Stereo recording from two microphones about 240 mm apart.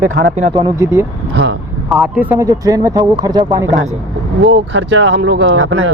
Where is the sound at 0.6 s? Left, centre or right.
Centre.